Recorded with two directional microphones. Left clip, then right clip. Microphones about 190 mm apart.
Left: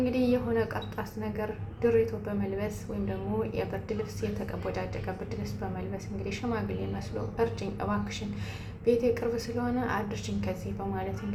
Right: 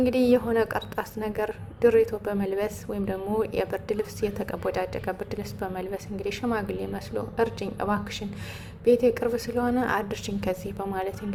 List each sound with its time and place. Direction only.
0.0 s a woman's voice: 55° right (ahead or behind)